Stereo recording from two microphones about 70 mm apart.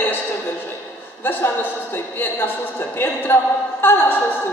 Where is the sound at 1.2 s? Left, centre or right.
Left.